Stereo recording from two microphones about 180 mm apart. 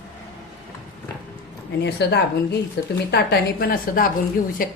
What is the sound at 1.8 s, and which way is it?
A woman's voice, 70° left (ahead or behind).